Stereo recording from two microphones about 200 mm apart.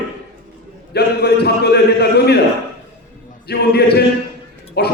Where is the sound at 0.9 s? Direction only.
55° left (ahead or behind).